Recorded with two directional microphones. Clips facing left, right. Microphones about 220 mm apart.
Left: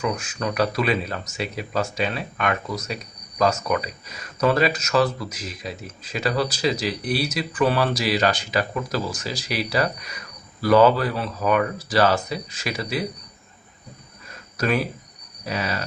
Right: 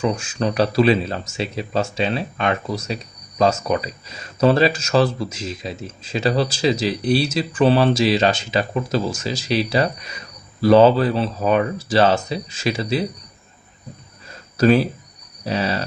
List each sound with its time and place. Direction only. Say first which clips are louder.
0.0 s speech: right 5 dB; 30° right (ahead or behind)
14.6 s speech: right 8 dB; 30° right (ahead or behind)